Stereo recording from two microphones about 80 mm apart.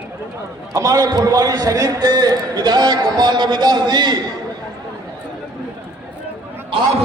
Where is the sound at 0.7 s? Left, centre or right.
Right.